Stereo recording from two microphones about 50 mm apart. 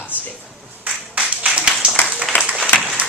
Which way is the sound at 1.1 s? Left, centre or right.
Right.